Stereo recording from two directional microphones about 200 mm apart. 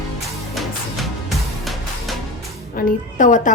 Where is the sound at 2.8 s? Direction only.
40° left (ahead or behind).